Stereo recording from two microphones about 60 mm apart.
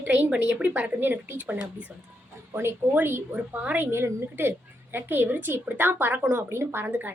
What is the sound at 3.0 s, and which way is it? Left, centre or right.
A woman's voice, right.